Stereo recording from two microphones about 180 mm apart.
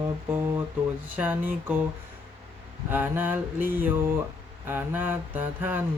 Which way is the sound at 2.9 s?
10° right (ahead or behind).